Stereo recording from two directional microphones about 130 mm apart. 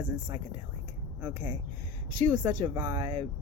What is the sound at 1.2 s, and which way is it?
Speech, 25° right (ahead or behind).